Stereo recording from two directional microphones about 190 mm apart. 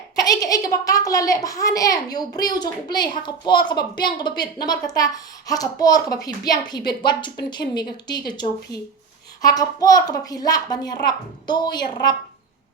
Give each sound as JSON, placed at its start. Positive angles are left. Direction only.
{"t": 0.2, "sound": "a child's voice", "side_deg": 20}